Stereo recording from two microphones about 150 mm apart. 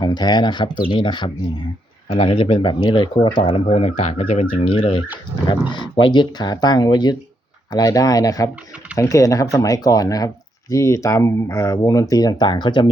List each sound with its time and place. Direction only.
0.0 s speech: 30° left (ahead or behind)